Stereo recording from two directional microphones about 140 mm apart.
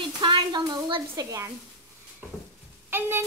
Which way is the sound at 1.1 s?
20° right (ahead or behind).